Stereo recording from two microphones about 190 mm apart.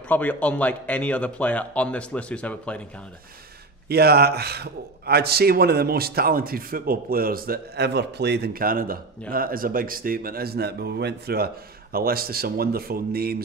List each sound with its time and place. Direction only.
0.1 s a man's voice: 10° left (ahead or behind)
3.9 s a man's voice: 55° right (ahead or behind)